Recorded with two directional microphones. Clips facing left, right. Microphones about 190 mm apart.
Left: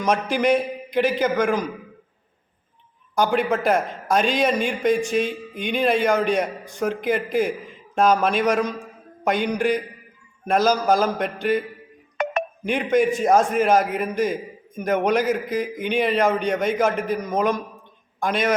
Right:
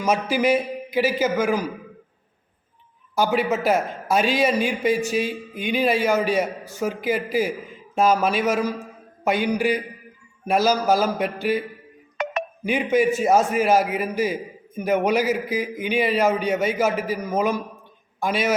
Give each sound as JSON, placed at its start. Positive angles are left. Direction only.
{"t": 0.0, "sound": "a man's voice", "side_deg": -5}
{"t": 3.2, "sound": "a man's voice", "side_deg": -5}
{"t": 12.1, "sound": "music", "side_deg": 50}
{"t": 12.6, "sound": "a man's voice", "side_deg": -5}